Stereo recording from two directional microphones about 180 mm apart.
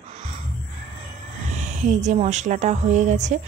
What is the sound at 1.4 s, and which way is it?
Speech, 40° right (ahead or behind).